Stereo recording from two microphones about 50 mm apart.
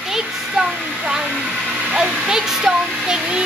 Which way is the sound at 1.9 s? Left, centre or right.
Centre.